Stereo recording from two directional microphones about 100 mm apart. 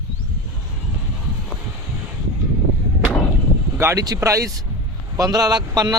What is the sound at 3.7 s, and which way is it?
Speech, 30° right (ahead or behind).